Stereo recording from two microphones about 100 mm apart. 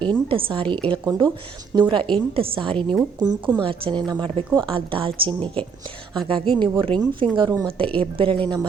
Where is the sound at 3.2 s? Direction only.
45° right (ahead or behind).